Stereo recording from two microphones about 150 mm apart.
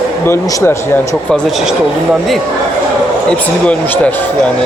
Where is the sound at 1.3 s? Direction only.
Centre (ahead or behind).